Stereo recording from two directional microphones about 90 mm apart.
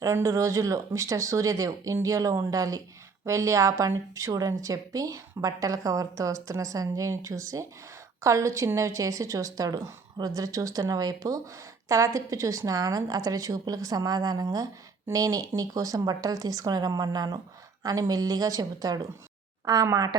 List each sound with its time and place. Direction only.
0.0 s a woman's voice: 35° right (ahead or behind)